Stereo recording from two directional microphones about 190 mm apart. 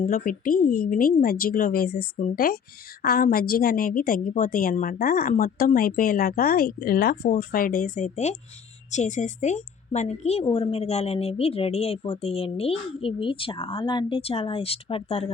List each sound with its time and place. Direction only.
0.0 s a woman's voice: 45° left (ahead or behind)